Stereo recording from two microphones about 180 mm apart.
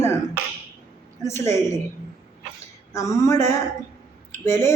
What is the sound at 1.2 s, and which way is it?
Speech, 15° left (ahead or behind).